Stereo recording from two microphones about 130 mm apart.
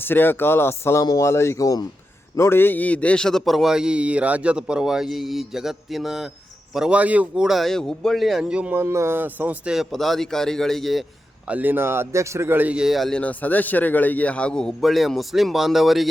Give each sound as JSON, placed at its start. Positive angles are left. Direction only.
{"t": 0.0, "sound": "a man's voice", "side_deg": 15}
{"t": 11.4, "sound": "a man's voice", "side_deg": -10}